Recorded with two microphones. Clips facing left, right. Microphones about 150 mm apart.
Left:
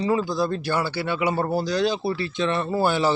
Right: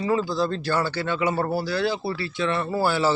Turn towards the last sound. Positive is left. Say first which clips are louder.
# left 1 dB
turn(degrees=20)  # may be behind; listen again after turning